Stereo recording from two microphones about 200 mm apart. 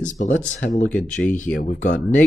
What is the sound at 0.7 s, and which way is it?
Speech, 5° left (ahead or behind).